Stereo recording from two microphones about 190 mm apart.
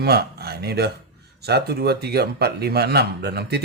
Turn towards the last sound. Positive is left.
turn(degrees=-55)  # may be behind; listen again after turning